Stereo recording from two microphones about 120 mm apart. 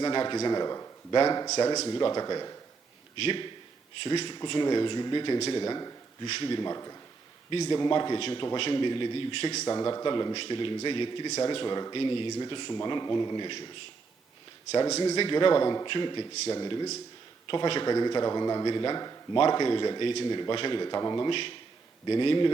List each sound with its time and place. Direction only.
0.0 s a man's voice: 40° left (ahead or behind)
1.9 s a man's voice: 40° left (ahead or behind)
3.2 s a man's voice: 45° left (ahead or behind)
9.6 s a man's voice: 35° left (ahead or behind)
10.3 s a man's voice: 45° left (ahead or behind)
14.7 s a man's voice: 30° left (ahead or behind)
15.2 s a man's voice: 45° left (ahead or behind)